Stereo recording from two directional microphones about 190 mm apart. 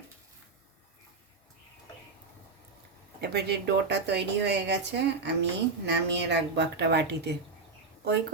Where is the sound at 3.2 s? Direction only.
60° right (ahead or behind).